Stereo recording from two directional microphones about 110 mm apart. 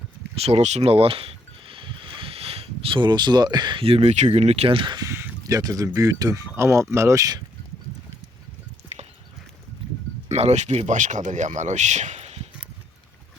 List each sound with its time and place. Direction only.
0.3 s a sound: 70° right (ahead or behind); by 3.8 s 40° right (ahead or behind)
3.8 s speech: 65° right (ahead or behind)
4.9 s speech: 25° right (ahead or behind)
8.9 s clip-clop: 80° right
10.2 s speech: 85° right